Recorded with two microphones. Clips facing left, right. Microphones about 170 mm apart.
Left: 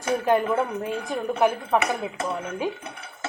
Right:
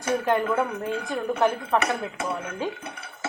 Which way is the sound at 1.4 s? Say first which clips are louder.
Left 2 dB; 15° left (ahead or behind).